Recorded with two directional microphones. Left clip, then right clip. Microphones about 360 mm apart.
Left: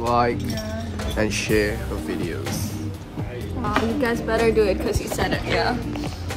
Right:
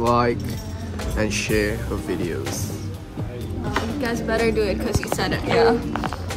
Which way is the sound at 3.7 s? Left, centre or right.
Centre.